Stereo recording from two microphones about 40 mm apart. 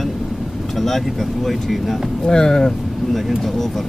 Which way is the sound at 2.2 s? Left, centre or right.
Centre.